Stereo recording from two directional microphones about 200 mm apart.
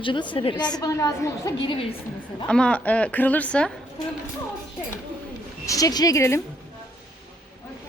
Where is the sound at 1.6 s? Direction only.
30° left (ahead or behind).